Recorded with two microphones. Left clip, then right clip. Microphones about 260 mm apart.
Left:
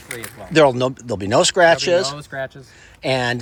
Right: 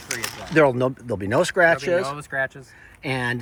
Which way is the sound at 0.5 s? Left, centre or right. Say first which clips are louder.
Left 4 dB; centre.